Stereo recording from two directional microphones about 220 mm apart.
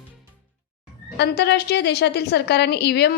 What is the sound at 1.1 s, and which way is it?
A woman's voice, 50° left (ahead or behind).